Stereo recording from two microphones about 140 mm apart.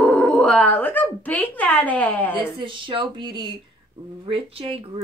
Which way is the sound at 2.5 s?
35° right (ahead or behind).